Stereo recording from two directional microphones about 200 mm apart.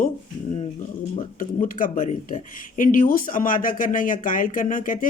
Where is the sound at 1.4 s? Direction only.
40° left (ahead or behind).